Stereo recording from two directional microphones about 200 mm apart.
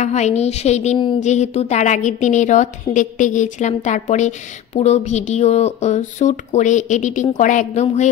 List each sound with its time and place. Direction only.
0.0 s speech: 35° left (ahead or behind)